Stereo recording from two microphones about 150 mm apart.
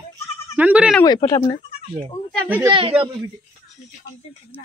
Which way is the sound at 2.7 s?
35° right (ahead or behind).